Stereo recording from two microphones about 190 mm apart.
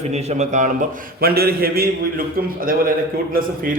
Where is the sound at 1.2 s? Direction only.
55° right (ahead or behind).